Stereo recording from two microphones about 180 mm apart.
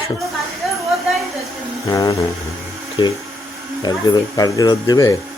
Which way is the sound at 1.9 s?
15° left (ahead or behind).